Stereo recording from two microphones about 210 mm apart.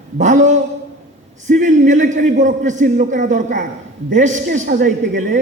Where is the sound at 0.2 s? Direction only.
35° right (ahead or behind).